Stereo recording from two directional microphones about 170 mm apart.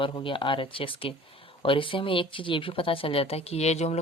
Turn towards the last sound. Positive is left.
turn(degrees=40)  # may be behind; listen again after turning